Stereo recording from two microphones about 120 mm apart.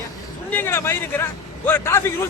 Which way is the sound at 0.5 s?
20° left (ahead or behind).